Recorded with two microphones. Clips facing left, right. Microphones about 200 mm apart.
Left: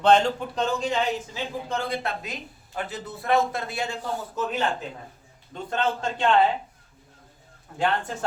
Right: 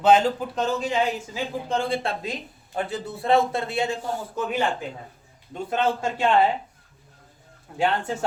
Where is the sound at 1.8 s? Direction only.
25° right (ahead or behind).